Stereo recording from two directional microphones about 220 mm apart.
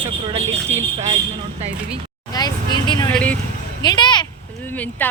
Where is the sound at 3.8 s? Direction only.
20° left (ahead or behind).